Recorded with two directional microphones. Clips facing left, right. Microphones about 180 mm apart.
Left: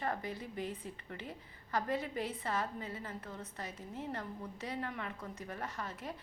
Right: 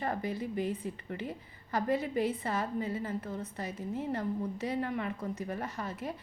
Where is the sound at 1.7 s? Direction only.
10° right (ahead or behind).